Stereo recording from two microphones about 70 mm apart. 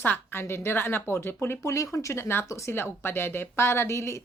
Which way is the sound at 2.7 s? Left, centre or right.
Left.